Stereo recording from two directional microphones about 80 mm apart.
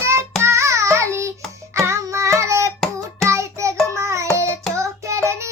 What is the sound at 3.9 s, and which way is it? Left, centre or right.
Child singing, right.